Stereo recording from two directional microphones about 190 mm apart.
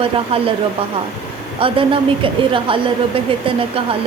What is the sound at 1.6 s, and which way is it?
A woman's voice, 30° right (ahead or behind).